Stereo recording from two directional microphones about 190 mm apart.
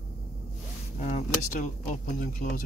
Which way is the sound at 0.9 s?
35° left (ahead or behind).